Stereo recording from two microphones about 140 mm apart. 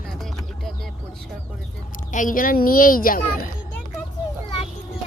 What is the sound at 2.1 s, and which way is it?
A child's voice, 70° left (ahead or behind).